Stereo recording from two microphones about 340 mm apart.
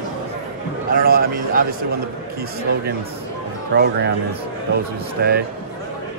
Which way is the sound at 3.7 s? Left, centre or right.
Right.